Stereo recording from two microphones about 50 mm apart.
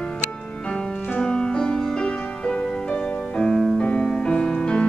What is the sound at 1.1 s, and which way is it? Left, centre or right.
Music, centre.